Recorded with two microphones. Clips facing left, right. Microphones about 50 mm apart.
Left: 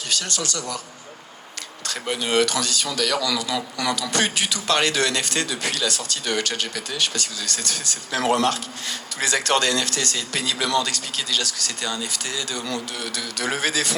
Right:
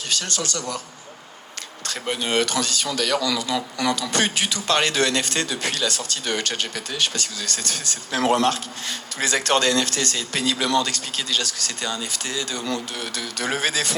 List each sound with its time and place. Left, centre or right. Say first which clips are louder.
0.2 s speech: even; right
1.9 s speech: left 1 dB; right